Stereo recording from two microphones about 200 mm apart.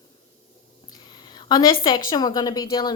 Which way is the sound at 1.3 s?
20° left (ahead or behind).